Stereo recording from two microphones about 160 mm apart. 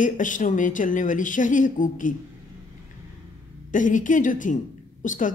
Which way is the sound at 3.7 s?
55° left (ahead or behind).